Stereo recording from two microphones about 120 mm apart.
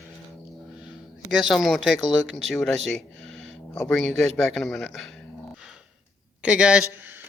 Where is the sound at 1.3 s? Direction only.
Centre (ahead or behind).